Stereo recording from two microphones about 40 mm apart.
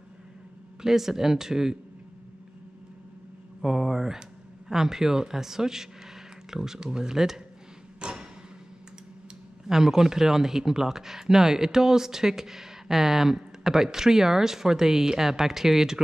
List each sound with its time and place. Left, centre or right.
0.8 s speech: centre
3.6 s speech: centre
8.0 s a sound: right
9.7 s speech: centre